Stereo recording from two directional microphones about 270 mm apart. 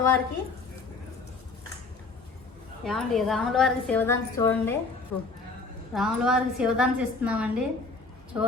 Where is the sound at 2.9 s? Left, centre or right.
Centre.